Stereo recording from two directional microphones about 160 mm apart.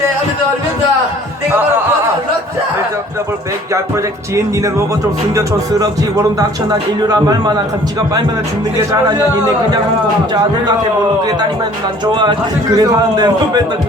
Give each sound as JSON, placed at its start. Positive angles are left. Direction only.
{"t": 3.7, "sound": "speech", "side_deg": -20}
{"t": 12.7, "sound": "speech", "side_deg": -20}